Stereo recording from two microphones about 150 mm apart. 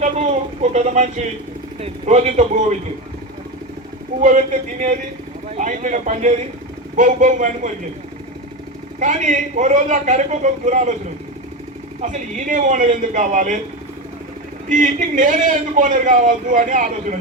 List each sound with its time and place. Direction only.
0.0 s speech: 50° right (ahead or behind)
5.5 s a man's voice: 55° right (ahead or behind)
9.0 s a man's voice: 55° right (ahead or behind)
12.5 s a man's voice: 55° right (ahead or behind)
14.7 s a man's voice: 55° right (ahead or behind)